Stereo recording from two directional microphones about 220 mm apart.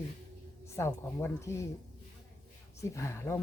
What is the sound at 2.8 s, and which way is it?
Speech, 10° left (ahead or behind).